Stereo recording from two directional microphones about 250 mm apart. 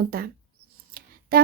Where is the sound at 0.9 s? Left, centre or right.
Right.